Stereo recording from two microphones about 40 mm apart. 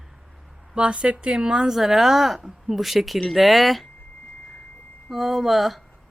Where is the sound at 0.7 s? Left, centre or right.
Right; by 3.8 s centre.